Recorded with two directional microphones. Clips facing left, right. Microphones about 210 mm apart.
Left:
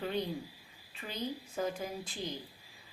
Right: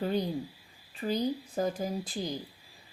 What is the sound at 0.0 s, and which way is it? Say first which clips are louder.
A woman's voice: right 5 dB; 40° right (ahead or behind).